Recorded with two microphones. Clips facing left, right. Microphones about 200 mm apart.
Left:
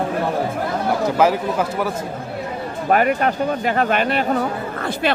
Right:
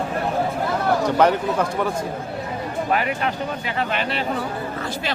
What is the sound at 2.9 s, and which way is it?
Speech, 50° left (ahead or behind).